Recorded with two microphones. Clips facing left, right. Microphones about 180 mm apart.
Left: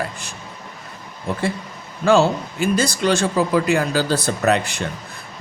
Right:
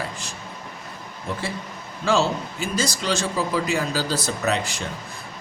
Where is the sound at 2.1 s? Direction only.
55° left (ahead or behind).